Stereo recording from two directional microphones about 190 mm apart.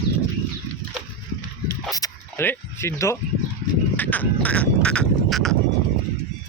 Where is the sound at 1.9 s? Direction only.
15° left (ahead or behind).